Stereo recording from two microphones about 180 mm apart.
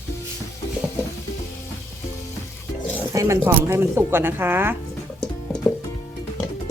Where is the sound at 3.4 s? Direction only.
15° right (ahead or behind).